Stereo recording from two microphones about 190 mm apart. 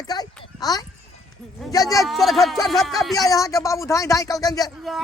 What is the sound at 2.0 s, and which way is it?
Speech, centre (ahead or behind).